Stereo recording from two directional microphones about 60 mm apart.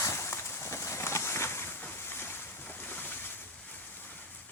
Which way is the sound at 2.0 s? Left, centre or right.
Left.